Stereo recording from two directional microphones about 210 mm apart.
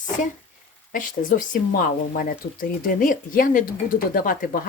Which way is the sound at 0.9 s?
40° left (ahead or behind).